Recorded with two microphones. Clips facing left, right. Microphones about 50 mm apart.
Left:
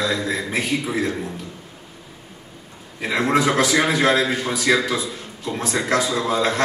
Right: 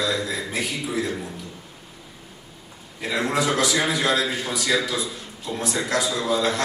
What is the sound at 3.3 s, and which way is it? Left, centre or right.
A man's voice, left.